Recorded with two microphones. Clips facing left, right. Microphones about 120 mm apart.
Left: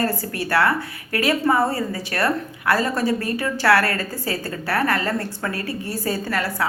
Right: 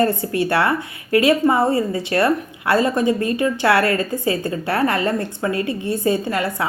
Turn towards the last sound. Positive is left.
turn(degrees=-20)  # may be behind; listen again after turning